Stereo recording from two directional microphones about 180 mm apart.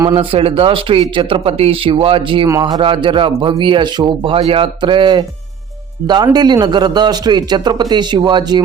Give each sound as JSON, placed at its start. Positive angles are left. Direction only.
{"t": 0.2, "sound": "speech", "side_deg": -30}